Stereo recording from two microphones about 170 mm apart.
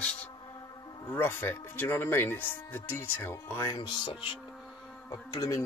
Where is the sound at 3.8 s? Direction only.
30° left (ahead or behind).